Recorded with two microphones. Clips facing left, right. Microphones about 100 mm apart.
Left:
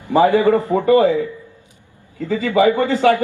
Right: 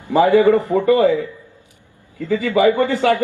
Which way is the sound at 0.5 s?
20° left (ahead or behind).